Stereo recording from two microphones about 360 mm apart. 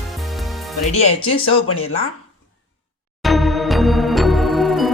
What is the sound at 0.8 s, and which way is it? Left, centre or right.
Speech, centre.